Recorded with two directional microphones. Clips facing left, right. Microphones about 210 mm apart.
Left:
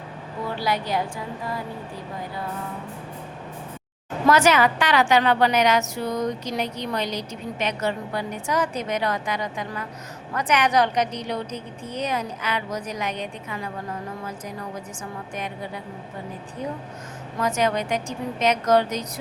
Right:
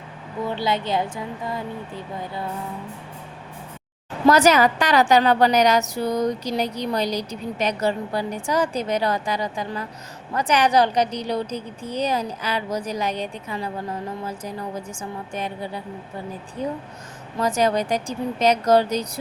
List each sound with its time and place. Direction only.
0.5 s a woman's voice: 25° right (ahead or behind)
4.3 s a woman's voice: 35° right (ahead or behind)
15.4 s a woman's voice: 30° right (ahead or behind)
17.4 s a woman's voice: 35° right (ahead or behind)